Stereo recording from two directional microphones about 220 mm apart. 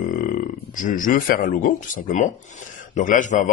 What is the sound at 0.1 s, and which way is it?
Speech, 40° left (ahead or behind).